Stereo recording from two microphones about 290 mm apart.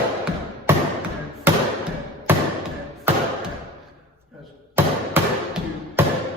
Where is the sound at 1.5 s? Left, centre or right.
Centre.